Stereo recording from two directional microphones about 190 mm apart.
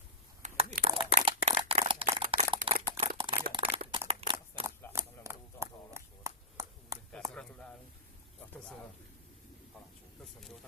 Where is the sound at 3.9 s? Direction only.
30° right (ahead or behind).